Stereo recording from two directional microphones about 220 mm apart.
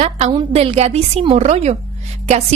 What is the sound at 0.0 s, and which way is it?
A woman's voice, 25° right (ahead or behind).